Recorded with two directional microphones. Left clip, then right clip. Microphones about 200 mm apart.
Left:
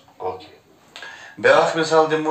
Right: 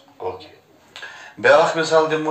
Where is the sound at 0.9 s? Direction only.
15° left (ahead or behind).